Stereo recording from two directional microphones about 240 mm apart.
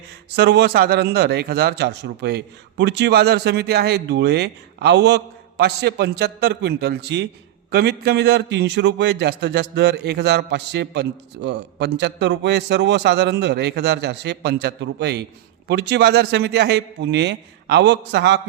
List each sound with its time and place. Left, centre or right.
0.3 s a man's voice: right